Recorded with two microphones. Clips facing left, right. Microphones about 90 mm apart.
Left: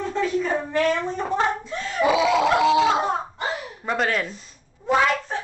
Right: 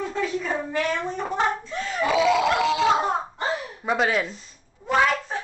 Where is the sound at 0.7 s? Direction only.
5° right (ahead or behind).